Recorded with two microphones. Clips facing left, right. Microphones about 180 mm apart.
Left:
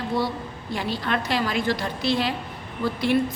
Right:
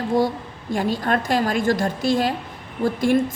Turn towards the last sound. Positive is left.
turn(degrees=-45)  # may be behind; listen again after turning